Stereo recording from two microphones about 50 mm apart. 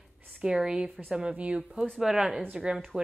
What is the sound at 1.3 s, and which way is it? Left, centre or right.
Speech, right.